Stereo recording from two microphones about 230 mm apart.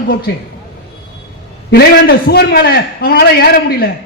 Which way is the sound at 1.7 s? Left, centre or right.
Left.